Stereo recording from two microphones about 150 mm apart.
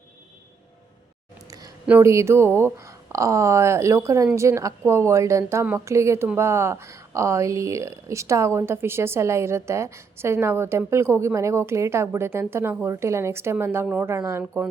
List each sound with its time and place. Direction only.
1.9 s speech: 15° right (ahead or behind)